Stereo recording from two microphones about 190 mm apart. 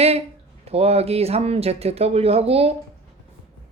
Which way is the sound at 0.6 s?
30° right (ahead or behind).